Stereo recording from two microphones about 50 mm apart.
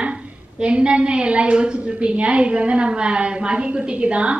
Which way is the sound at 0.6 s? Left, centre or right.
Right.